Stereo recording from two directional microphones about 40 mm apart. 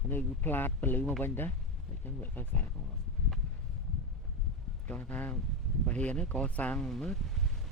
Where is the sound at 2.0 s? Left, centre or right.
Left.